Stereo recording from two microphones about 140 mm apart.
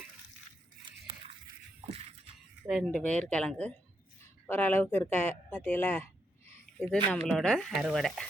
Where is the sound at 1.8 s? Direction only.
50° right (ahead or behind).